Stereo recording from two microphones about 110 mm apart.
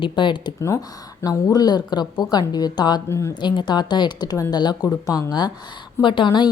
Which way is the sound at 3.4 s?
40° left (ahead or behind).